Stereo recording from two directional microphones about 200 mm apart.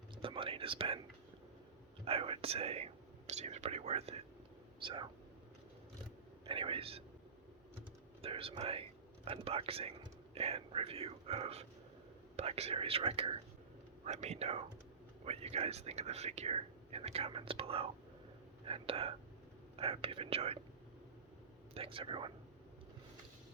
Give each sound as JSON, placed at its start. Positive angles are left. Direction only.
{"t": 0.2, "sound": "whispering", "side_deg": -25}
{"t": 2.0, "sound": "speech", "side_deg": -30}
{"t": 6.5, "sound": "speech", "side_deg": -25}
{"t": 8.2, "sound": "speech", "side_deg": -30}
{"t": 21.8, "sound": "speech", "side_deg": -25}